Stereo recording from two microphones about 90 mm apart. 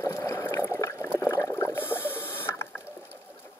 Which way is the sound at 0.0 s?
30° left (ahead or behind).